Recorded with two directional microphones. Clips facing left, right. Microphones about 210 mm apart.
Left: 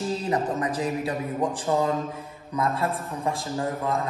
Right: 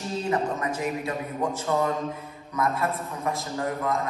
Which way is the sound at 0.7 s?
30° left (ahead or behind).